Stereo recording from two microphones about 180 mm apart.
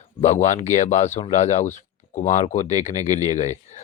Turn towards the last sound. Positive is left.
turn(degrees=40)  # may be behind; listen again after turning